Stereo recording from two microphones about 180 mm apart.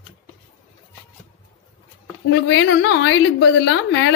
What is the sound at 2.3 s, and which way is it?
A woman's voice, 85° left.